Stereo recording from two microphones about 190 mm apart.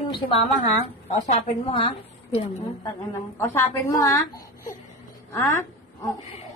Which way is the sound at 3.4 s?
15° left (ahead or behind).